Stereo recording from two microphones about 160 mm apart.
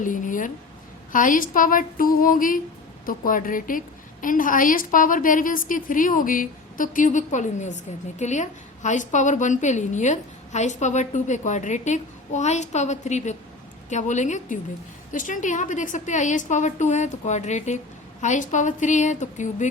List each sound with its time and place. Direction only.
0.0 s a woman's voice: 55° left (ahead or behind)
1.1 s a sound: 55° left (ahead or behind)
3.1 s a woman's voice: 60° left (ahead or behind)